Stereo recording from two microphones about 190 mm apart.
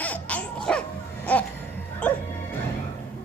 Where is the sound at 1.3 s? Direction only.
5° left (ahead or behind).